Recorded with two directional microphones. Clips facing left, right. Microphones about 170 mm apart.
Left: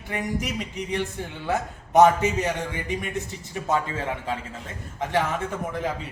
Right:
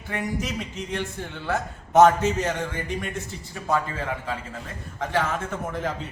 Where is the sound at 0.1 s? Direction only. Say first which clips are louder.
Even; 15° left (ahead or behind).